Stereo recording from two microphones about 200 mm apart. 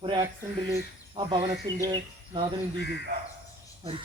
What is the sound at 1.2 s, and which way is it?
Speech, 30° right (ahead or behind).